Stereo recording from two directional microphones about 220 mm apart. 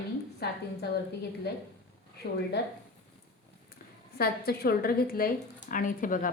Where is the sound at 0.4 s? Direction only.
45° left (ahead or behind).